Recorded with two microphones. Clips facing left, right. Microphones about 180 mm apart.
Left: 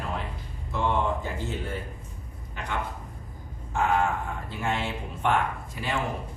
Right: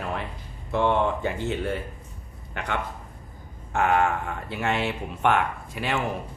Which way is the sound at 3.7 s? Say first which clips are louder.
Right 3 dB; 65° right (ahead or behind).